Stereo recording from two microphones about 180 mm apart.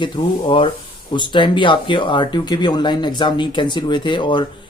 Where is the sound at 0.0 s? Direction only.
25° left (ahead or behind).